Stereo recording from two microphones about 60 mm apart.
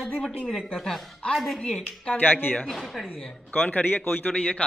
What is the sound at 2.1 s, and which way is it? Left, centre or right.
Speech, left.